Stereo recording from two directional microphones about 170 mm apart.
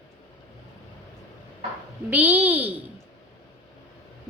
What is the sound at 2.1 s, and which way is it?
Speech, 10° right (ahead or behind).